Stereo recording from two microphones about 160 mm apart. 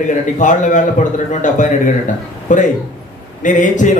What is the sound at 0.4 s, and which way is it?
A man's voice, 50° left (ahead or behind).